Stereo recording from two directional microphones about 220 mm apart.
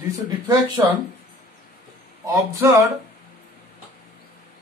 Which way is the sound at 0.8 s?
15° right (ahead or behind).